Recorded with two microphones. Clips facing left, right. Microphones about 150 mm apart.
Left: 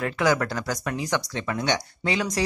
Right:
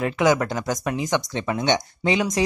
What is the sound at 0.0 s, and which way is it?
A man's voice, 20° right (ahead or behind).